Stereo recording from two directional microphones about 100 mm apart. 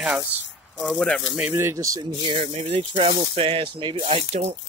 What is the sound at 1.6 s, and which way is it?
Speech, 30° right (ahead or behind).